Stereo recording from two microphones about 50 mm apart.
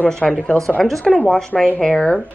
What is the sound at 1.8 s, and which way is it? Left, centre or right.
Speech, centre.